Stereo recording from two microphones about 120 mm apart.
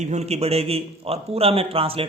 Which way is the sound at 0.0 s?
70° right (ahead or behind).